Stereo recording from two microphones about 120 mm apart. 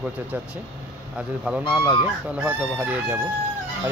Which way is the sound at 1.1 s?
10° right (ahead or behind).